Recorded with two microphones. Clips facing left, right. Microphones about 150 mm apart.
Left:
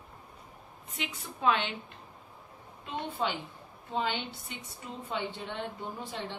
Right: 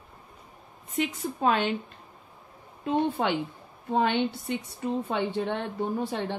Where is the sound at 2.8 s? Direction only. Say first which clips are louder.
Right 8 dB; 55° right (ahead or behind).